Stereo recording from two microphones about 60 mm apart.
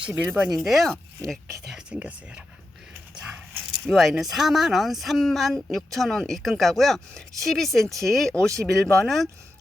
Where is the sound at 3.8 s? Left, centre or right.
Centre.